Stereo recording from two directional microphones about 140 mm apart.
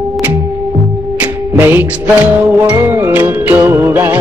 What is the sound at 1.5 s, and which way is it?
Music, 15° right (ahead or behind).